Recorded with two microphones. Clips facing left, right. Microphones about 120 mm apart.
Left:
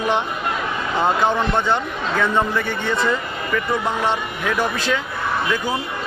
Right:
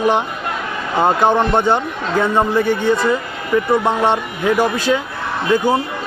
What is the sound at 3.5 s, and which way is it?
Speech, 20° right (ahead or behind).